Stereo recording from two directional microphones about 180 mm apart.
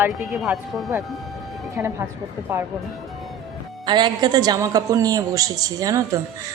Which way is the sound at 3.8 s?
25° right (ahead or behind).